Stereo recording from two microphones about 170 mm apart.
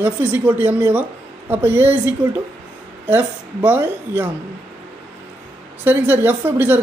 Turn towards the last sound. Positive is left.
turn(degrees=-10)  # may be behind; listen again after turning